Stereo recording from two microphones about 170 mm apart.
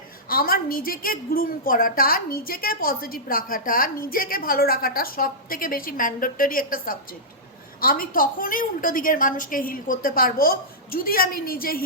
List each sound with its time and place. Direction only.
0.3 s a woman's voice: 60° left (ahead or behind)